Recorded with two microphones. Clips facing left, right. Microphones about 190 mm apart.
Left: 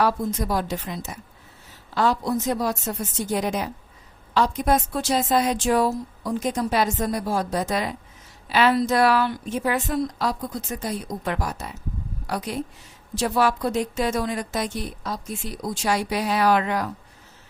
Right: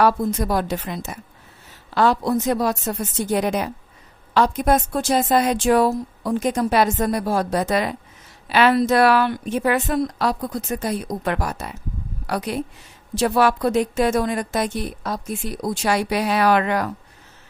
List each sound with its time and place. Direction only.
0.0 s a woman's voice: 60° right (ahead or behind)